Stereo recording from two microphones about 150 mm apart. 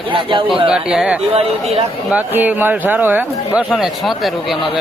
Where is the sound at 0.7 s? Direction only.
5° right (ahead or behind).